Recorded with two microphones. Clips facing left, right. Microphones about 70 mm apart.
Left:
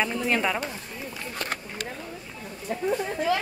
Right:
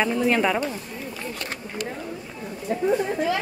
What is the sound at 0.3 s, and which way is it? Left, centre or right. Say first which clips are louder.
Speech: right 3 dB; centre.